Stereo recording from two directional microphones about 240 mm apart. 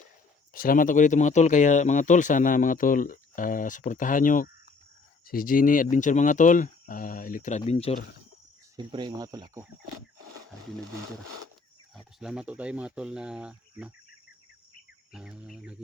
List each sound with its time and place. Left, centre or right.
0.5 s speech: left
8.7 s speech: centre
11.9 s speech: centre
15.1 s speech: centre